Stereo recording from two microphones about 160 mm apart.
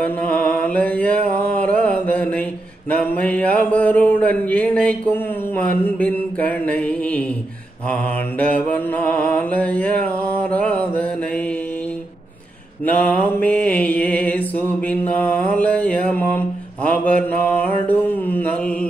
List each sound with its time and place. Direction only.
0.0 s mantra: 5° left (ahead or behind)
2.9 s a sound: 10° left (ahead or behind)
12.8 s mantra: 10° left (ahead or behind)